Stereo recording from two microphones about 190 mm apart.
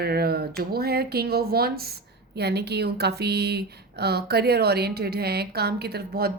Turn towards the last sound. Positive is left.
turn(degrees=-55)  # may be behind; listen again after turning